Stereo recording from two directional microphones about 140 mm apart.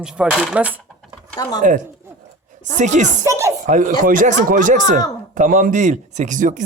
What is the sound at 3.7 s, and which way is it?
Speech, 75° right (ahead or behind).